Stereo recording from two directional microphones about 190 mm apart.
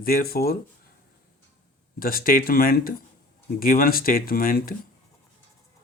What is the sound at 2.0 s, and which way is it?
Speech, 50° left (ahead or behind).